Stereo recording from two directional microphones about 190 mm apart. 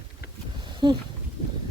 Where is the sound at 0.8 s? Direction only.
25° right (ahead or behind).